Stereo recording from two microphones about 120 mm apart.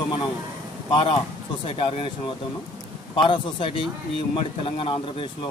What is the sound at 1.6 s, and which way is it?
Speech, 50° left (ahead or behind).